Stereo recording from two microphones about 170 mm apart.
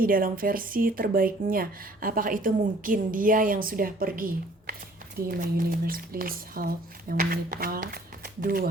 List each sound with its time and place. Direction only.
0.0 s speech: 55° right (ahead or behind)